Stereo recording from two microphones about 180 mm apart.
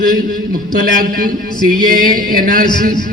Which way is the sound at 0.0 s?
50° right (ahead or behind).